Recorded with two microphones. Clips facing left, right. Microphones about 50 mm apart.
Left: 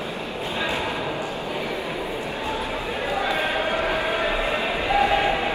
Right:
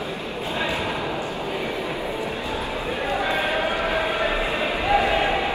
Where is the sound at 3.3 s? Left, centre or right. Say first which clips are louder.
Even; right.